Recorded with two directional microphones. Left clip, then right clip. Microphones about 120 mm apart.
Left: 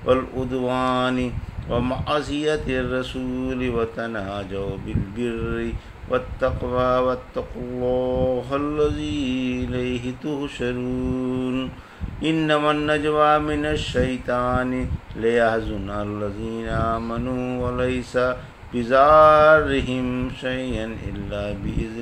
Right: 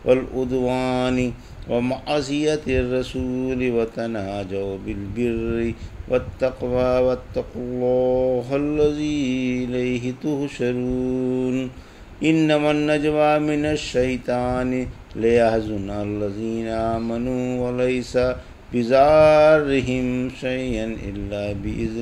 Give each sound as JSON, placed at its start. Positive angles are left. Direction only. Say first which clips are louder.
{"t": 0.0, "sound": "speech", "louder": "right 2 dB", "side_deg": -25}